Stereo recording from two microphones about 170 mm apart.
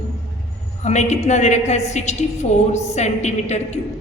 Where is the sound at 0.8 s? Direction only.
40° left (ahead or behind).